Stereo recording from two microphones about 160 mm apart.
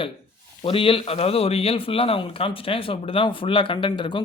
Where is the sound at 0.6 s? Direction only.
35° left (ahead or behind).